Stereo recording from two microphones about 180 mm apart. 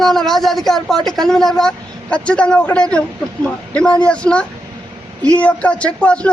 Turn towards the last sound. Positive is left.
turn(degrees=5)  # may be behind; listen again after turning